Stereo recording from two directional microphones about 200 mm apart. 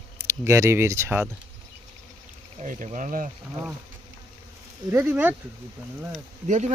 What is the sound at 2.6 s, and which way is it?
Speech, 35° right (ahead or behind).